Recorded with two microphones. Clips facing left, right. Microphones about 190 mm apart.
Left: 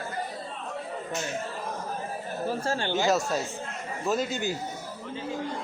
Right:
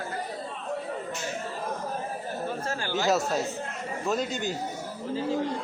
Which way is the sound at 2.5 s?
30° left (ahead or behind).